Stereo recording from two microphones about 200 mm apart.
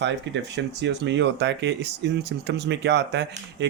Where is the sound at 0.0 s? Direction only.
60° right (ahead or behind).